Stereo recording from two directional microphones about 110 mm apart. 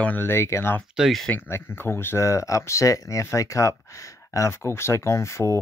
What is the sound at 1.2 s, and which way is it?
Speech, 20° left (ahead or behind).